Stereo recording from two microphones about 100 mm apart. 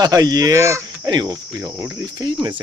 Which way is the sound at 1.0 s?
45° right (ahead or behind).